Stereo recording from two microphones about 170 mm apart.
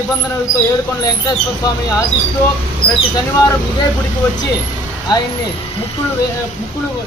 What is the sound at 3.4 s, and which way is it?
Speech, 20° left (ahead or behind).